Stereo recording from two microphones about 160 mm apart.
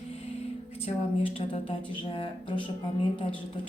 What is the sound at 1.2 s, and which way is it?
Speech, 35° left (ahead or behind).